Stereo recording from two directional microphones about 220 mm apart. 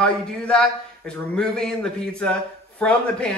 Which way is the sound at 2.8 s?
5° left (ahead or behind).